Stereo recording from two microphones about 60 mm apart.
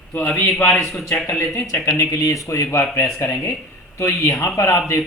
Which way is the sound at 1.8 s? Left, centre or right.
Left.